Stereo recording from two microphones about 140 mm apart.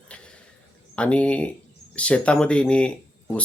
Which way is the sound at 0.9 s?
10° left (ahead or behind).